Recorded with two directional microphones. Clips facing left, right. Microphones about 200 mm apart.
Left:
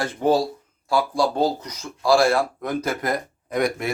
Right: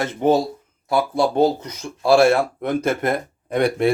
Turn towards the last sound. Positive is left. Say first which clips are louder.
# right 5 dB
turn(degrees=-30)  # may be behind; listen again after turning